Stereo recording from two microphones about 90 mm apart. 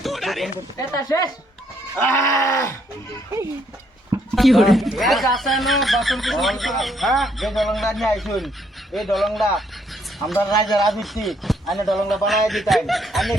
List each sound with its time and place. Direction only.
0.0 s a sound: centre (ahead or behind)
0.8 s speech: 40° left (ahead or behind)
2.1 s groan: 35° left (ahead or behind)
4.4 s speech: centre (ahead or behind)
10.5 s a man's voice: 50° left (ahead or behind)
10.8 s speech: centre (ahead or behind)